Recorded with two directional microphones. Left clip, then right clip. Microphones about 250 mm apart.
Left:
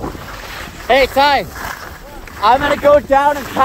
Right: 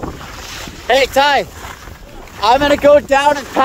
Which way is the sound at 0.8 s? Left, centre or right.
Right.